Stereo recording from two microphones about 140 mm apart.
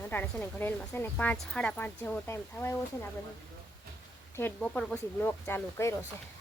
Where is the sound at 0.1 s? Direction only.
15° left (ahead or behind).